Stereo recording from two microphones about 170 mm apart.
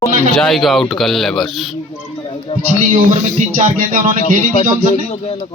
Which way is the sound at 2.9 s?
45° right (ahead or behind).